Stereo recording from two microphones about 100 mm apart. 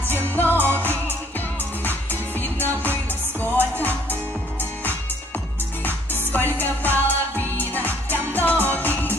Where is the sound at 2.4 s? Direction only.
20° left (ahead or behind).